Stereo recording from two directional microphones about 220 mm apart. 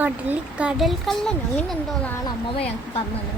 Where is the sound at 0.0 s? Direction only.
5° right (ahead or behind).